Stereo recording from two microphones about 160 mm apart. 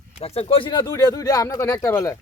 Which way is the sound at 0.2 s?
40° left (ahead or behind).